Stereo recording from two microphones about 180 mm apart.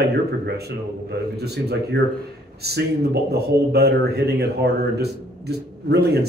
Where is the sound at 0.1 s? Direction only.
65° right (ahead or behind).